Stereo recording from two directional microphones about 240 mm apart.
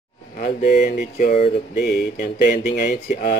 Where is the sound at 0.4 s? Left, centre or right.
Left.